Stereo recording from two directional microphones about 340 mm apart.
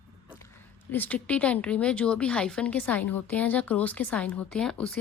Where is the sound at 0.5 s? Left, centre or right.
Centre.